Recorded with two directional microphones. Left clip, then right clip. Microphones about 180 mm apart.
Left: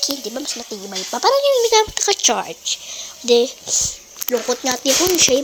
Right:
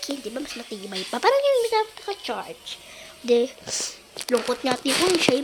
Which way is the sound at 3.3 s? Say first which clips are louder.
Left 6 dB; 10° left (ahead or behind).